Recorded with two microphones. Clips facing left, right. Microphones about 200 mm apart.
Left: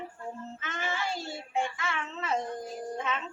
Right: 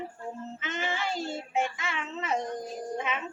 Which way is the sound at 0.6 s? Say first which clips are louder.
Right 2 dB; 20° right (ahead or behind).